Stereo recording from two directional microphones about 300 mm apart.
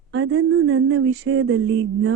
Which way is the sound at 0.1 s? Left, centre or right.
Right.